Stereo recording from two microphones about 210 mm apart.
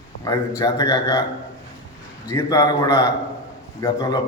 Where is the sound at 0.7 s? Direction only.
15° left (ahead or behind).